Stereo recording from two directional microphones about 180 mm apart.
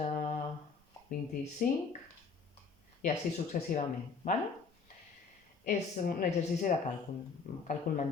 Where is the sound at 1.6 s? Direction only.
50° left (ahead or behind).